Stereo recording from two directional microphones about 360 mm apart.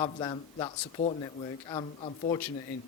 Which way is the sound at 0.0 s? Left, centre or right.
Centre.